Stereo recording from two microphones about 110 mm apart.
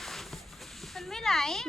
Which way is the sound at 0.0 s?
Centre (ahead or behind).